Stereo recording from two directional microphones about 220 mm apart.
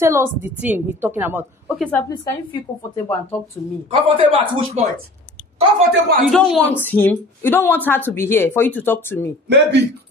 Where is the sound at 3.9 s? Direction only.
25° right (ahead or behind).